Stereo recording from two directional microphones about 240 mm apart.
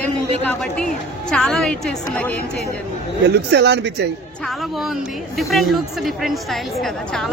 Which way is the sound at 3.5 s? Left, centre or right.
Right.